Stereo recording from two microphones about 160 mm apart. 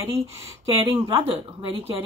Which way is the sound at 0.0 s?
15° right (ahead or behind).